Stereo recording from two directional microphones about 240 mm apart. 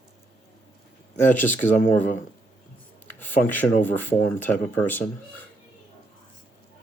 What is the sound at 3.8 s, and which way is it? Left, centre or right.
Speech, centre.